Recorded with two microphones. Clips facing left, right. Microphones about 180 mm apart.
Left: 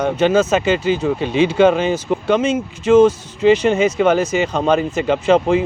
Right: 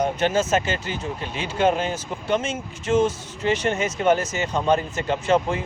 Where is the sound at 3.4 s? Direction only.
90° left.